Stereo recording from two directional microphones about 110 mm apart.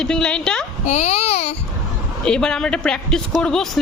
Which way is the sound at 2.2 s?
5° left (ahead or behind).